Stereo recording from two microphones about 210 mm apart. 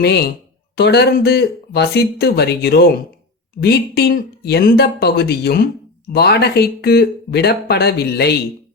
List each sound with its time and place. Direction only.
0.0 s speech: 50° left (ahead or behind)